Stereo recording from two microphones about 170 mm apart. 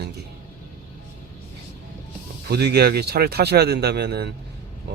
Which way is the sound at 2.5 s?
70° right (ahead or behind).